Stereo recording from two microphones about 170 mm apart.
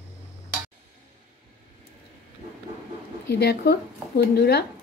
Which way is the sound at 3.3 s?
75° left (ahead or behind).